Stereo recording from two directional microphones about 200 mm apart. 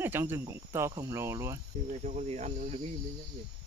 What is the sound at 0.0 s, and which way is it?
Speech, 10° right (ahead or behind).